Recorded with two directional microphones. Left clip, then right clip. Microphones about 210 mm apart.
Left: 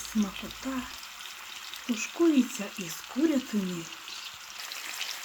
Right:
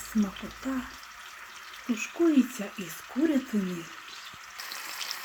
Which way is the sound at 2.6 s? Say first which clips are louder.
Even; 5° left (ahead or behind).